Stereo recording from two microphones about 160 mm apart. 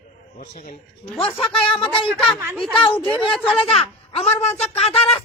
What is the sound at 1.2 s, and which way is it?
Speech, 35° left (ahead or behind).